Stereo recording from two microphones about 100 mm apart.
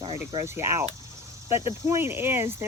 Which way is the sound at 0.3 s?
25° right (ahead or behind).